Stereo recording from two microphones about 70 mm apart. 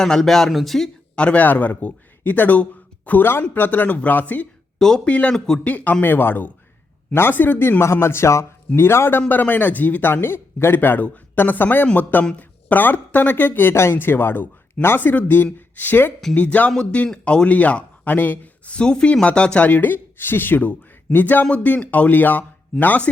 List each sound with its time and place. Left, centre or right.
0.0 s speech: centre
1.1 s a man's voice: centre
4.8 s a man's voice: centre
5.0 s speech: centre
7.8 s a man's voice: left